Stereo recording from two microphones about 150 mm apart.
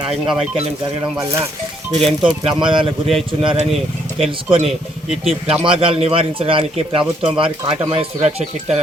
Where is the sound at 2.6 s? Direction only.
35° right (ahead or behind).